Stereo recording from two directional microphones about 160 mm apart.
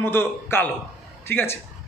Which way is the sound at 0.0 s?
15° left (ahead or behind).